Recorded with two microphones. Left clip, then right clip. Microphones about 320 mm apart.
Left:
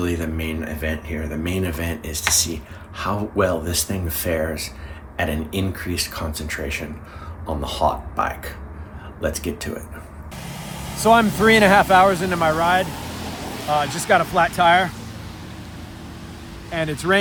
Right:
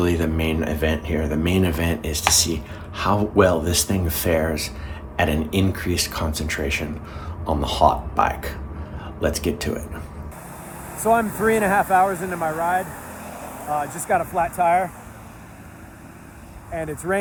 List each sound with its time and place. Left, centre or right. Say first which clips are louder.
0.0 s speech: right 3 dB; centre
11.0 s speech: left 4 dB; left
14.2 s speech: left 2 dB; left
16.7 s speech: left 4 dB; centre